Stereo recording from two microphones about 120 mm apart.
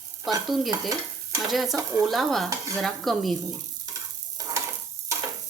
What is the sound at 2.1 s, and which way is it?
Speech, centre (ahead or behind).